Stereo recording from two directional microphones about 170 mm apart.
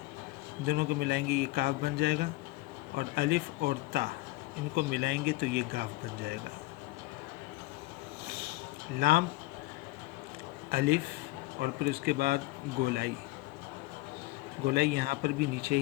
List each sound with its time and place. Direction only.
0.7 s speech: 70° right (ahead or behind)
9.0 s speech: 65° right (ahead or behind)
10.7 s speech: 65° right (ahead or behind)
14.7 s speech: 65° right (ahead or behind)